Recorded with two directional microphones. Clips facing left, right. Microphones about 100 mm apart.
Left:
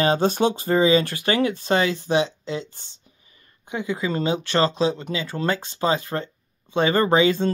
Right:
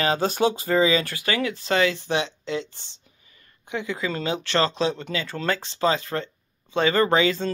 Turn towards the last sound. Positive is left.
turn(degrees=20)  # may be behind; listen again after turning